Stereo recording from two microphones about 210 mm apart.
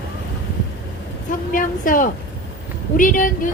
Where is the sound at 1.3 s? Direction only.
40° left (ahead or behind).